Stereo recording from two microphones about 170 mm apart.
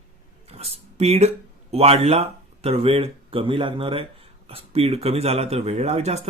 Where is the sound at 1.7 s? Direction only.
35° right (ahead or behind).